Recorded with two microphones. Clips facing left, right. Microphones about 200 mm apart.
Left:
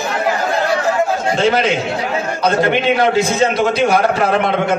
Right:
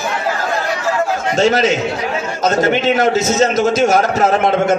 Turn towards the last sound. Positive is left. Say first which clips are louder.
# right 2 dB
turn(degrees=-45)  # may be behind; listen again after turning